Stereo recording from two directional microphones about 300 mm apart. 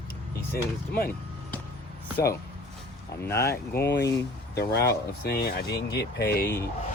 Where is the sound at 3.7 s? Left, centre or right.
Left.